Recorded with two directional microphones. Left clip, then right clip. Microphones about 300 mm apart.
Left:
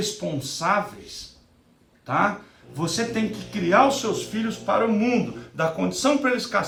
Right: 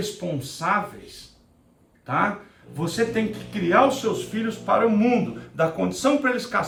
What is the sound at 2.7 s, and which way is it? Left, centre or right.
Speech, centre.